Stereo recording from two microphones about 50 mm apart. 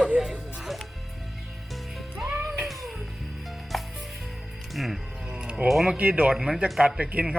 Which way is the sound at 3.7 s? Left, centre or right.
Centre.